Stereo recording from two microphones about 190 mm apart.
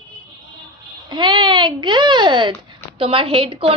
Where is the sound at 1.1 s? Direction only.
25° right (ahead or behind).